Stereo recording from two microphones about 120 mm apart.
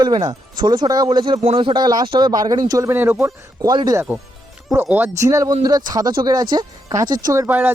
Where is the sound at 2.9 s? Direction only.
20° right (ahead or behind).